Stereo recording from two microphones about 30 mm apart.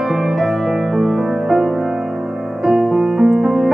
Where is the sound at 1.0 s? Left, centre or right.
Centre.